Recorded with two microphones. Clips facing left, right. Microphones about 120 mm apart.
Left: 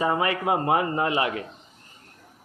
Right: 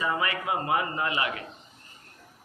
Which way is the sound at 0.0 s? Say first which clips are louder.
Left 5 dB; 30° left (ahead or behind).